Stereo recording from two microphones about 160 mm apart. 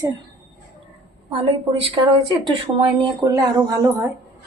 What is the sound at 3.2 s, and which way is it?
Speech, 20° right (ahead or behind).